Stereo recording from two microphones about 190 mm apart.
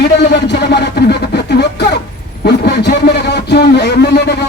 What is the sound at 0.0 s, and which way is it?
Speech, 60° left (ahead or behind).